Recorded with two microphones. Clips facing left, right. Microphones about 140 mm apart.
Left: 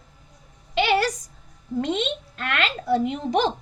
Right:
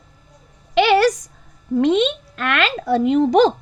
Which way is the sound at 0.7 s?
90° right.